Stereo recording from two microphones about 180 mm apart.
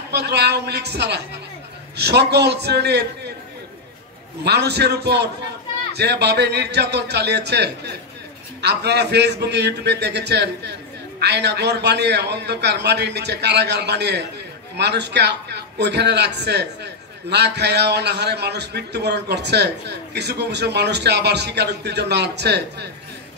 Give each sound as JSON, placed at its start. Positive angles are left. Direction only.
{"t": 0.1, "sound": "a man's voice", "side_deg": -65}
{"t": 4.5, "sound": "a man's voice", "side_deg": -65}